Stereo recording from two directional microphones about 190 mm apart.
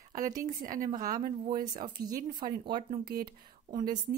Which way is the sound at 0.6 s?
45° right (ahead or behind).